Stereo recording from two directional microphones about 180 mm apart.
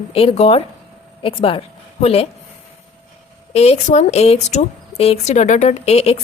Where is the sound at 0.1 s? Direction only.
35° left (ahead or behind).